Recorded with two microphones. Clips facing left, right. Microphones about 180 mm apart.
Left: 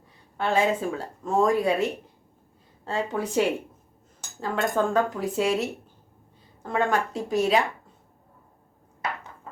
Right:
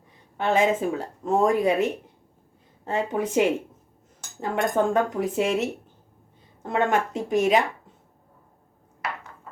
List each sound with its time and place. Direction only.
0.3 s speech: 20° right (ahead or behind)